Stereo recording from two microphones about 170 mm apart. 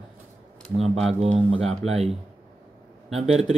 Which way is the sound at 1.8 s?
40° right (ahead or behind).